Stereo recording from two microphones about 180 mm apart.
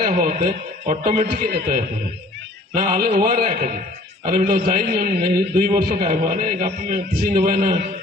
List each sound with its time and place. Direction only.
0.0 s a man's voice: 50° right (ahead or behind)
2.7 s a man's voice: 50° right (ahead or behind)
7.1 s a man's voice: 55° right (ahead or behind)